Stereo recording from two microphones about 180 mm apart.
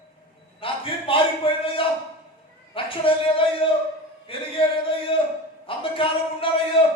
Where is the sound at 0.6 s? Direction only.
30° left (ahead or behind).